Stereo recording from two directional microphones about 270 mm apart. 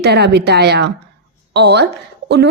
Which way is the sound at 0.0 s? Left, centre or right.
Right.